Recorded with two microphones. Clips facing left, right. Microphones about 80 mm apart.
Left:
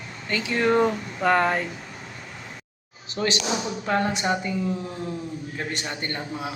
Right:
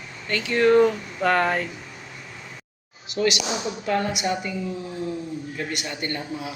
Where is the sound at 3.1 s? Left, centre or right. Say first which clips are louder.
Right 2 dB; left.